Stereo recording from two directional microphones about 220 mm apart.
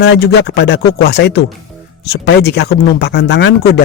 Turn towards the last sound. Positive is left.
turn(degrees=50)  # may be behind; listen again after turning